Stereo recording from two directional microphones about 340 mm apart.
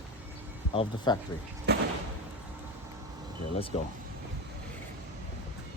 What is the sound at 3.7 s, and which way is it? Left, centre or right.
Speech, centre.